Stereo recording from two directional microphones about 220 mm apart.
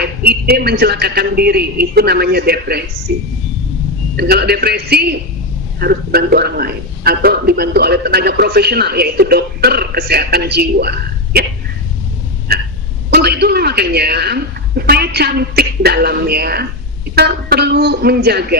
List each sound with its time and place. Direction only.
0.0 s a man's voice: 45° right (ahead or behind)
12.5 s a sound: 45° right (ahead or behind)
13.1 s a man's voice: 45° right (ahead or behind)